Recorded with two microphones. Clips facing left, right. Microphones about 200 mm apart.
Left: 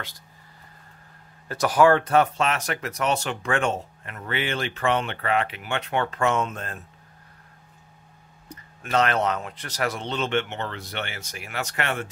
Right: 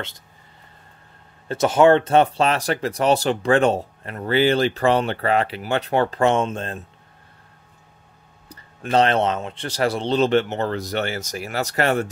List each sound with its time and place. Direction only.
1.5 s speech: 25° right (ahead or behind)
8.8 s speech: 30° right (ahead or behind)